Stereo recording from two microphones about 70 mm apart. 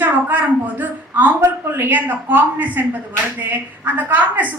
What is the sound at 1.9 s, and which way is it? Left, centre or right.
A woman's voice, right.